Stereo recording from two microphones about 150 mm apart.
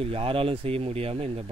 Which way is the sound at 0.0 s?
40° right (ahead or behind).